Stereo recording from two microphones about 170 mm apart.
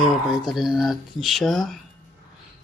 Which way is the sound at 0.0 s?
Centre (ahead or behind).